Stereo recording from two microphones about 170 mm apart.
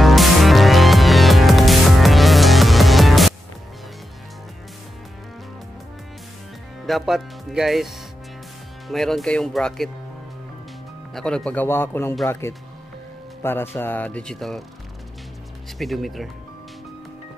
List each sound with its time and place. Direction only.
0.0 s music: centre (ahead or behind)
6.9 s speech: centre (ahead or behind)
11.1 s speech: 5° left (ahead or behind)
15.8 s speech: centre (ahead or behind)